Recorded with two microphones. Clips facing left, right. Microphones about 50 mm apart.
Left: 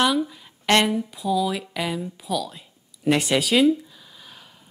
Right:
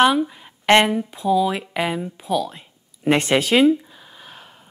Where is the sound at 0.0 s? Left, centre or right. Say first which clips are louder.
Right 5 dB; right.